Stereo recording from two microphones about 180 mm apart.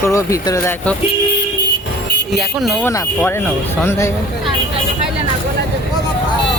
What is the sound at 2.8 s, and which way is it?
Speech, 15° left (ahead or behind).